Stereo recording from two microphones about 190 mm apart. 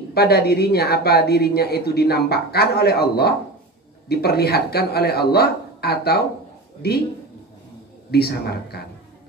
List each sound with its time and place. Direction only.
0.1 s speech: 55° left (ahead or behind)
8.1 s speech: 55° left (ahead or behind)